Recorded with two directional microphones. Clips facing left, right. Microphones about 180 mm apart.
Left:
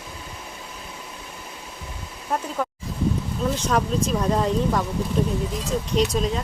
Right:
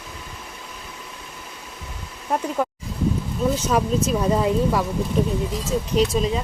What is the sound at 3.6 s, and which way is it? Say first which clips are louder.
Speech: right 2 dB; 10° right (ahead or behind).